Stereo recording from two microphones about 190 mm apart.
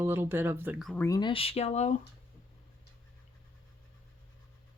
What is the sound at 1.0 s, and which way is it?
Speech, 20° left (ahead or behind).